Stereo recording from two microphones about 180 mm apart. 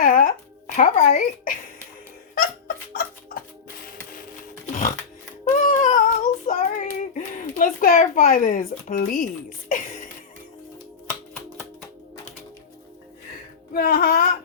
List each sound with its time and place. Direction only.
0.0 s music: 50° left (ahead or behind)
0.8 s speech: 45° left (ahead or behind)
2.9 s a sound: 55° left (ahead or behind)
4.1 s pig: 50° left (ahead or behind)
5.6 s child singing: 45° left (ahead or behind)
13.7 s a sound: 55° left (ahead or behind)